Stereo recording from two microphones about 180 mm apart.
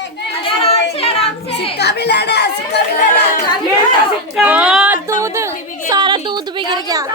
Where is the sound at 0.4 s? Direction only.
35° left (ahead or behind).